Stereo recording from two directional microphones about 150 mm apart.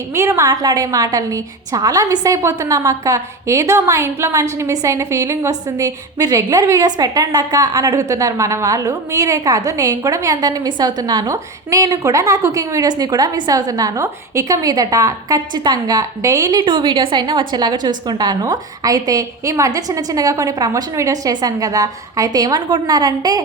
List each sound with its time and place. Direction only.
0.1 s a woman's voice: 20° right (ahead or behind)